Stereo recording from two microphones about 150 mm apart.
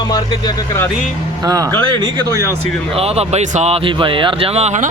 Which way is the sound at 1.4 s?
25° right (ahead or behind).